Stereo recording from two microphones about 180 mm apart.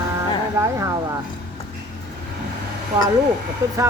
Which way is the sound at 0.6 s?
15° right (ahead or behind).